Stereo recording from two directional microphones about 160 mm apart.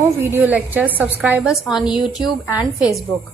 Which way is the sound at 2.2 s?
20° left (ahead or behind).